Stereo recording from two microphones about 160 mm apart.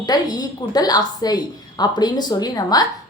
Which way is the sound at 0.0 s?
25° left (ahead or behind).